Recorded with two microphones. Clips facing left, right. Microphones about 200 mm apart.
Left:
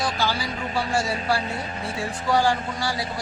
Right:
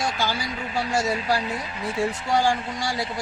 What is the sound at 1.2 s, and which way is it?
Speech, 40° left (ahead or behind).